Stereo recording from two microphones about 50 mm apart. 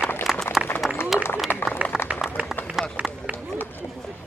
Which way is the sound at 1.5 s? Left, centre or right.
Left.